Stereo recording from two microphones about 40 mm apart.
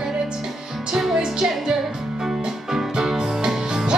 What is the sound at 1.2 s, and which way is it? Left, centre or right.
Music, centre.